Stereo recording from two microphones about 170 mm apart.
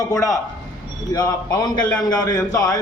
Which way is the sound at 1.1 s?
25° left (ahead or behind).